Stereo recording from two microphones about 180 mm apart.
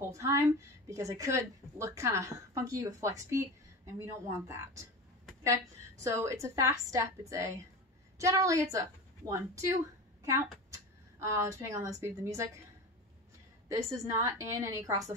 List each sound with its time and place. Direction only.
0.1 s a woman's voice: 15° right (ahead or behind)
13.7 s a woman's voice: 15° right (ahead or behind)